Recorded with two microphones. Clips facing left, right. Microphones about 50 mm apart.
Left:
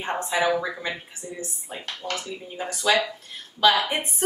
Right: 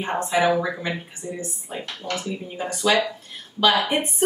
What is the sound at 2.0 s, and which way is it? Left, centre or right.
Speech, centre.